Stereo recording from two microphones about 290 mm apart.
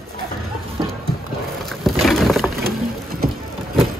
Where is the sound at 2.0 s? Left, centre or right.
Centre.